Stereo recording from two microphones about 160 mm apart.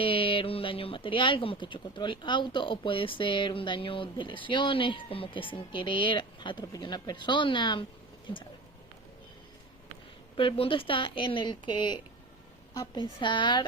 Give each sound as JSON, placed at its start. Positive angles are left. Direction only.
{"t": 0.0, "sound": "speech", "side_deg": 35}
{"t": 10.3, "sound": "a woman's voice", "side_deg": 35}